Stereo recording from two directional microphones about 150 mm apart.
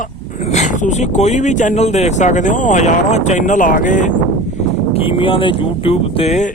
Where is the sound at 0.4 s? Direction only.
50° left (ahead or behind).